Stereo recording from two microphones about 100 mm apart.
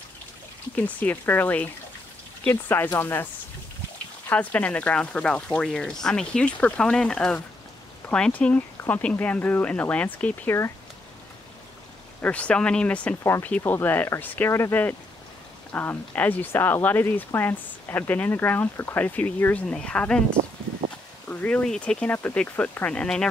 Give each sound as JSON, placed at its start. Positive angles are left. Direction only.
{"t": 0.7, "sound": "speech", "side_deg": 15}
{"t": 4.3, "sound": "speech", "side_deg": 15}
{"t": 12.2, "sound": "speech", "side_deg": 10}
{"t": 13.2, "sound": "speech", "side_deg": 25}